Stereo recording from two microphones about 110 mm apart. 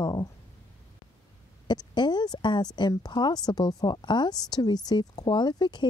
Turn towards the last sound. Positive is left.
turn(degrees=40)  # may be behind; listen again after turning